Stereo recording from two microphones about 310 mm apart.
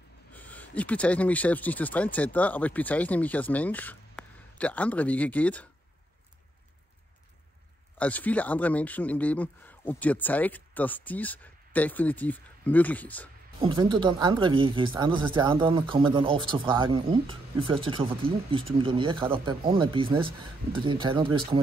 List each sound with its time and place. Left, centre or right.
0.3 s speech: centre
8.0 s speech: centre
13.6 s speech: centre